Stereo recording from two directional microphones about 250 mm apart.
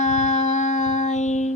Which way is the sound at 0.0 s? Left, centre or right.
Left.